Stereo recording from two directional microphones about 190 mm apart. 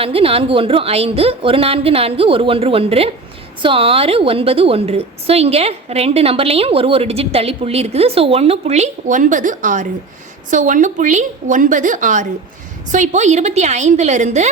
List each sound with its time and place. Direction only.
0.0 s a woman's voice: 30° right (ahead or behind)